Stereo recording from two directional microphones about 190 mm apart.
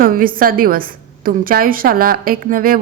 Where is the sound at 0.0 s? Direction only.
50° right (ahead or behind).